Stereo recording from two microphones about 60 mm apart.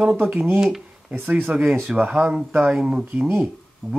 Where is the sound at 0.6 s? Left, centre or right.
Centre.